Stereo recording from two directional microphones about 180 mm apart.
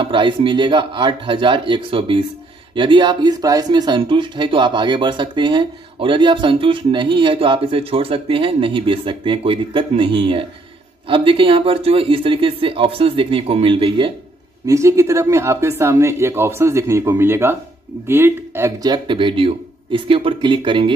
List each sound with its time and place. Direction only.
0.0 s speech: 30° right (ahead or behind)
14.7 s speech: 15° right (ahead or behind)